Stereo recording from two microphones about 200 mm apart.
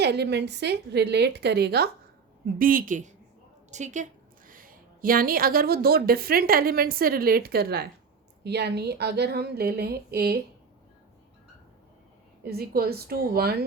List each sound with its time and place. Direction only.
0.0 s a woman's voice: 55° right (ahead or behind)
12.5 s a woman's voice: 50° right (ahead or behind)